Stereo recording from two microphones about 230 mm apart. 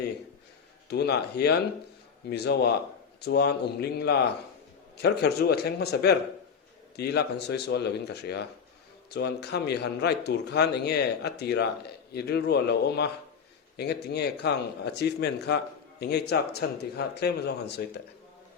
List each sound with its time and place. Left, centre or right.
0.9 s speech: left